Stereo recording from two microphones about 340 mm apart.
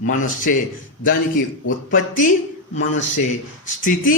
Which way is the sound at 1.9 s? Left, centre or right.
Left.